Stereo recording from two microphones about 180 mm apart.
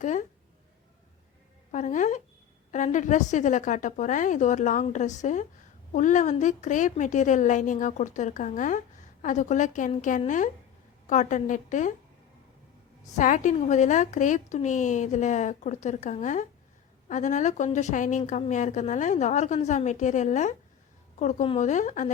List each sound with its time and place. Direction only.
0.0 s a woman's voice: 45° left (ahead or behind)
1.7 s a woman's voice: 45° left (ahead or behind)
13.1 s a woman's voice: 45° left (ahead or behind)